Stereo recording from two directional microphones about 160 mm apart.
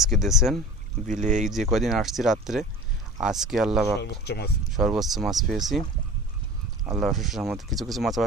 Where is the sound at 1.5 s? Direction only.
Centre (ahead or behind).